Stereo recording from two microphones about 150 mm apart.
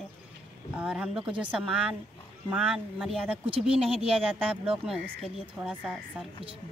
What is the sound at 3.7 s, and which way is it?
Speech, 40° right (ahead or behind).